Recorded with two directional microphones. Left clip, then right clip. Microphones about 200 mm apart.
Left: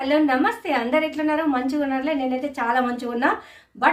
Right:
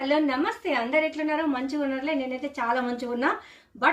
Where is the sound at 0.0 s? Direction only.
20° left (ahead or behind).